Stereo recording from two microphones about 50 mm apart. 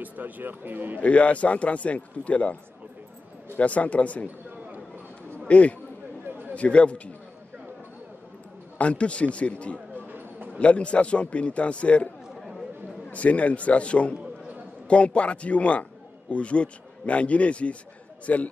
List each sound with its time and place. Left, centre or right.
0.0 s speech: right
1.0 s a man's voice: left
5.5 s a man's voice: left
6.2 s a sound: right
6.5 s speech: left
8.7 s speech: left
10.0 s a sound: right
10.6 s a man's voice: left
13.1 s a man's voice: left